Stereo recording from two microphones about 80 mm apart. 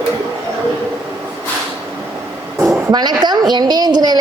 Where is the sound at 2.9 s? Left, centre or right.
Right.